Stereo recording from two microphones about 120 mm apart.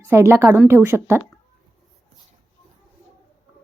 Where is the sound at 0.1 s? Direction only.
20° right (ahead or behind).